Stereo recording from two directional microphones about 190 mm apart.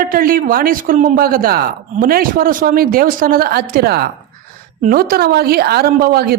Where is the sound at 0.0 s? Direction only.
50° right (ahead or behind).